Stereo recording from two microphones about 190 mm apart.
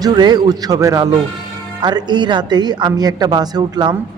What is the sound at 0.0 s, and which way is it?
Speech, 20° right (ahead or behind).